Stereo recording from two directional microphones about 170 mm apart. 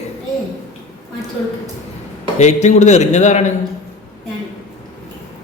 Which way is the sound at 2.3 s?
45° left (ahead or behind).